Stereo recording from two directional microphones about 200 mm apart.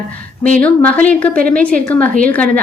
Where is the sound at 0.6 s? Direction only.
10° left (ahead or behind).